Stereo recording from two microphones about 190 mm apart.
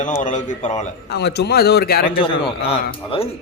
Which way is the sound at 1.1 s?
60° left (ahead or behind).